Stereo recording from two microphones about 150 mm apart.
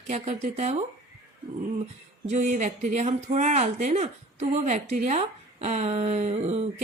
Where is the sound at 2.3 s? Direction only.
50° right (ahead or behind).